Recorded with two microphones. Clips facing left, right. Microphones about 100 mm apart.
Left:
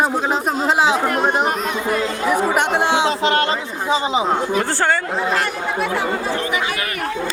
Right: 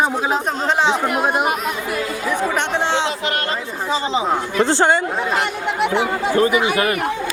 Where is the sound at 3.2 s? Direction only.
30° left (ahead or behind).